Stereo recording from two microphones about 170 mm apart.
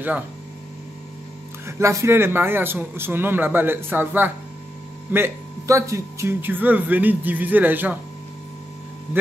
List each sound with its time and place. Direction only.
1.7 s speech: 15° right (ahead or behind)